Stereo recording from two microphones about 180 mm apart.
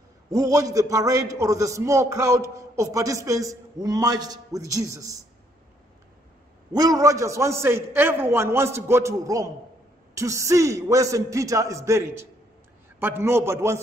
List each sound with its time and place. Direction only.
0.3 s a man's voice: 20° right (ahead or behind)
6.7 s a man's voice: 20° right (ahead or behind)